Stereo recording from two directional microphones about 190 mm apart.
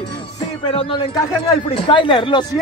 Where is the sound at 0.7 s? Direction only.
25° left (ahead or behind).